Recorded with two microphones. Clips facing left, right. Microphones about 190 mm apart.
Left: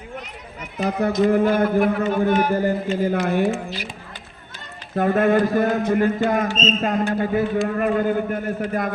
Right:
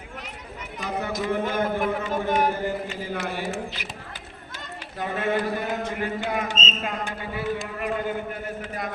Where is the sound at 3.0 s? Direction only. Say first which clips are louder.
Left 10 dB; 50° left (ahead or behind).